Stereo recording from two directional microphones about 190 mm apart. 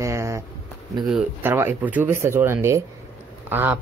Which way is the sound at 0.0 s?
15° right (ahead or behind).